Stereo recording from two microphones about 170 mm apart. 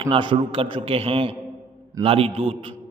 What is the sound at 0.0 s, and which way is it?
A man's voice, 30° right (ahead or behind).